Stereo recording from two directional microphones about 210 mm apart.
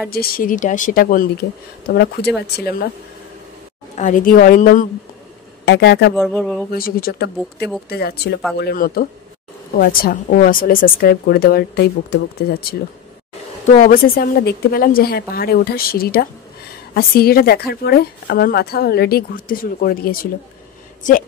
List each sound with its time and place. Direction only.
0.1 s speech: 45° left (ahead or behind)
2.4 s speech: 50° left (ahead or behind)
3.9 s speech: 40° left (ahead or behind)
5.7 s speech: 55° left (ahead or behind)
6.1 s speech: 5° left (ahead or behind)
6.7 s speech: 45° left (ahead or behind)
13.7 s speech: 45° left (ahead or behind)